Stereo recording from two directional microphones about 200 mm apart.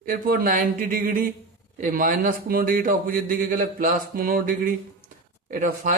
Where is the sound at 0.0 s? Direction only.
45° right (ahead or behind).